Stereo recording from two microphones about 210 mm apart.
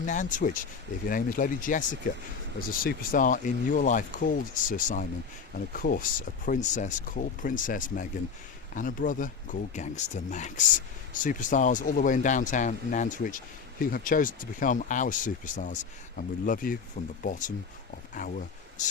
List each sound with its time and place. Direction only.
0.0 s speech: 40° left (ahead or behind)